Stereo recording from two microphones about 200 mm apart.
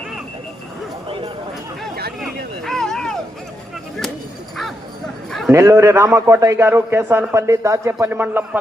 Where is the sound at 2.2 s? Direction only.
Centre (ahead or behind).